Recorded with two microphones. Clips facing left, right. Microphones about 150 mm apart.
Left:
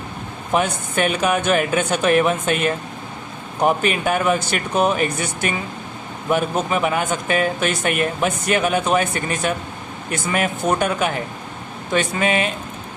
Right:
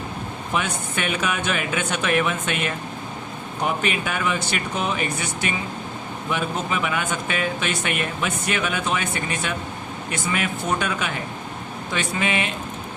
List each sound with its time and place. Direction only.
0.5 s speech: 40° left (ahead or behind)